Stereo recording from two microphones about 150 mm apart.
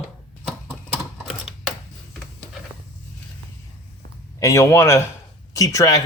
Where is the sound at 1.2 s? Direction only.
5° right (ahead or behind).